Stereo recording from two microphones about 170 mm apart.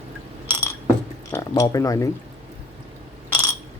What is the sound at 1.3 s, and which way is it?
Speech, 20° left (ahead or behind).